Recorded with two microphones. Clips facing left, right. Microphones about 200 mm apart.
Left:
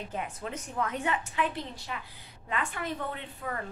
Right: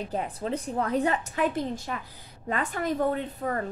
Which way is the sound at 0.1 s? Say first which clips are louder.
Right 7 dB; 35° right (ahead or behind).